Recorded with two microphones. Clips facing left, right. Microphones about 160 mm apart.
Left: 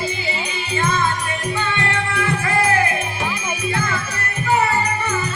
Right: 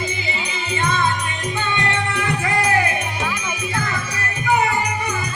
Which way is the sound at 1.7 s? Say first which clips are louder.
Even; 20° right (ahead or behind).